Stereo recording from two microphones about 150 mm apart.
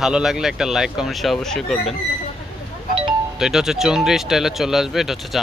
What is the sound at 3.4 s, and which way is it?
Speech, 5° right (ahead or behind).